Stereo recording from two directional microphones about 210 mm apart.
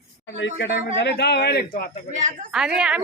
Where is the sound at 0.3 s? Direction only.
60° left (ahead or behind).